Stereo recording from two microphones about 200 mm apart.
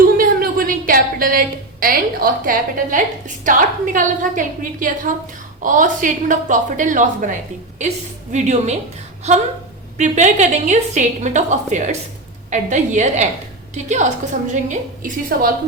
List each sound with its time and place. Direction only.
0.2 s a woman's voice: 45° right (ahead or behind)